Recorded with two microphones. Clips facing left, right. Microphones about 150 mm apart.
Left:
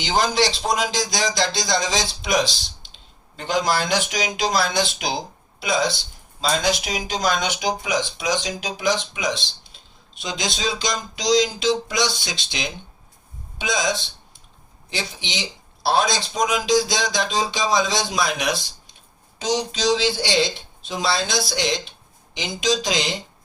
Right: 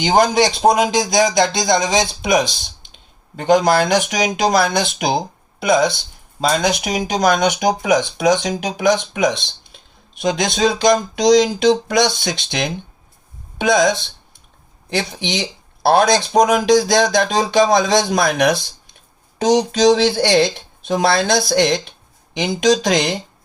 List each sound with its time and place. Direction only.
0.0 s a man's voice: 50° right (ahead or behind)